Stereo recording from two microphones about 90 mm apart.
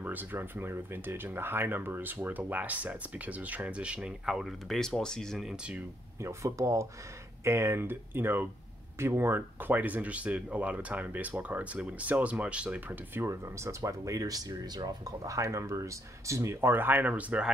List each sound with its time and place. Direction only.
0.0 s speech: 20° right (ahead or behind); by 5.6 s centre (ahead or behind)
6.2 s speech: 35° right (ahead or behind); by 17.5 s 15° right (ahead or behind)